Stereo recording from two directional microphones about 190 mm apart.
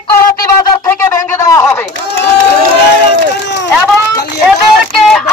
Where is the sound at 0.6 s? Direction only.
15° left (ahead or behind).